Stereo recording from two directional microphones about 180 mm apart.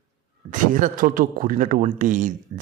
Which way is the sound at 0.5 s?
45° right (ahead or behind).